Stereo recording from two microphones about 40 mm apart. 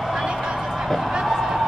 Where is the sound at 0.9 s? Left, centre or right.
Centre.